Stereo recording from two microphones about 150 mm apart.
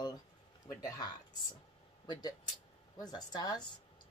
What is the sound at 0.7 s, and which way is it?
Speech, 25° left (ahead or behind).